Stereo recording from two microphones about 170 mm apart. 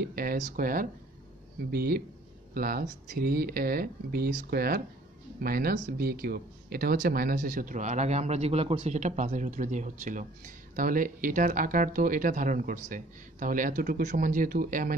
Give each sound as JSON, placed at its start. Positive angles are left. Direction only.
{"t": 0.0, "sound": "speech", "side_deg": -60}